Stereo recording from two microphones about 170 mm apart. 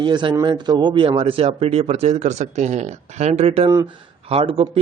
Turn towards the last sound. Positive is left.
turn(degrees=-35)  # may be behind; listen again after turning